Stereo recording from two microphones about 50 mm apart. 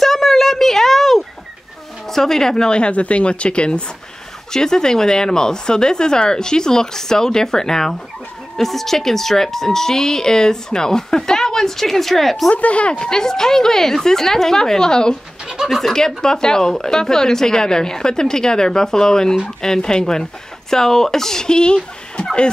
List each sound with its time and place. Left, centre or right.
0.0 s a sound: centre
2.0 s speech: centre
12.4 s speech: left
15.4 s bird: centre
15.7 s speech: centre